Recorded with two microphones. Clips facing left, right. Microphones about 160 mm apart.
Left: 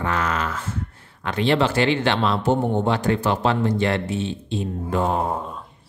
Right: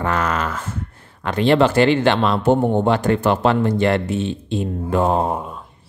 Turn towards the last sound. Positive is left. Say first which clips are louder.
# right 4 dB
turn(degrees=-50)  # may be behind; listen again after turning